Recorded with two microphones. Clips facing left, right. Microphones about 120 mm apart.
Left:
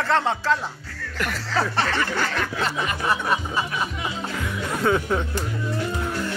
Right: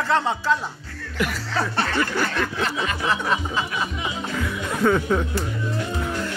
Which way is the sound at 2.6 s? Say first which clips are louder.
Even; 10° left (ahead or behind).